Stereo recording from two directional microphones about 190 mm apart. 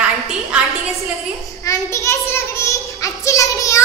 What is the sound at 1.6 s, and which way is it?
Child singing, 15° left (ahead or behind).